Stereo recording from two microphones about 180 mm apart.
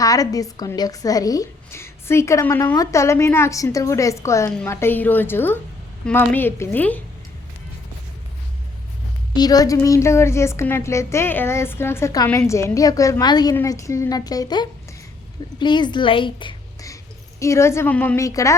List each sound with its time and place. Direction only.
0.0 s a woman's voice: 20° left (ahead or behind)
9.3 s a woman's voice: 20° left (ahead or behind)